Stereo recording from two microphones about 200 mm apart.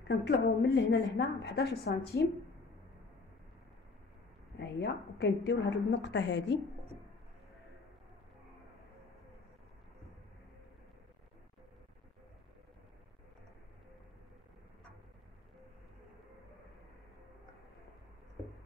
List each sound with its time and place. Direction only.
0.1 s a woman's voice: 55° left (ahead or behind)
4.6 s a woman's voice: 55° left (ahead or behind)